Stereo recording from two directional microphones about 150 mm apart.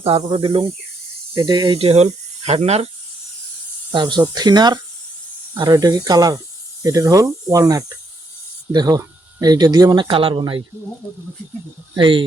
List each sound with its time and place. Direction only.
0.0 s speech: 40° right (ahead or behind)
1.4 s speech: 25° right (ahead or behind)
1.8 s speech: 40° right (ahead or behind)
3.9 s speech: 30° right (ahead or behind)
11.9 s speech: 35° right (ahead or behind)